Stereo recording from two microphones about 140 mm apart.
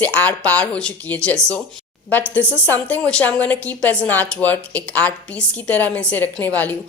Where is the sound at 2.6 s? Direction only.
10° left (ahead or behind).